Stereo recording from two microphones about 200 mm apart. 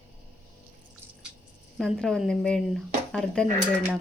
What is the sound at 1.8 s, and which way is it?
Speech, centre (ahead or behind).